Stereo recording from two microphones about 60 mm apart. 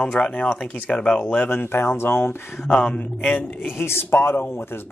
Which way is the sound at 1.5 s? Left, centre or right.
Left.